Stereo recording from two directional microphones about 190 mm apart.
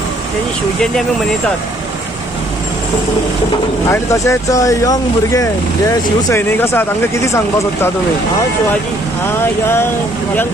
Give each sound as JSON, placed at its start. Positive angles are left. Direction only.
{"t": 3.9, "sound": "speech", "side_deg": 15}